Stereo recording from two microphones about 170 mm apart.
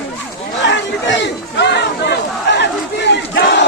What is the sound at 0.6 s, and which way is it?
Crowd, 90° left.